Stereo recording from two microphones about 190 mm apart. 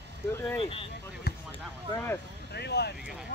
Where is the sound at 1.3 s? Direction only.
55° left (ahead or behind).